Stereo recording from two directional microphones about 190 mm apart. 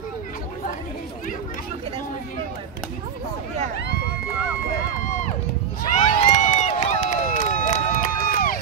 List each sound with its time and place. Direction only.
5.9 s run: 40° left (ahead or behind)